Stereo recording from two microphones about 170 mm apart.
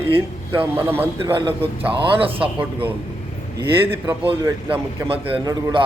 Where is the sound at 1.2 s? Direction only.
30° right (ahead or behind).